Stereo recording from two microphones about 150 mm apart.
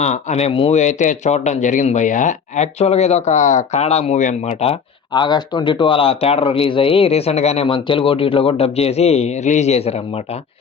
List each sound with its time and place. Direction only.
0.0 s speech: 50° left (ahead or behind)
0.7 s speech: 50° left (ahead or behind)